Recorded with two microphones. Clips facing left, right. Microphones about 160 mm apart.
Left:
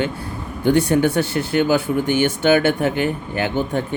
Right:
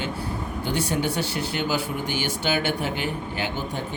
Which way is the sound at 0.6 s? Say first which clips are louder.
Left 10 dB; 55° left (ahead or behind).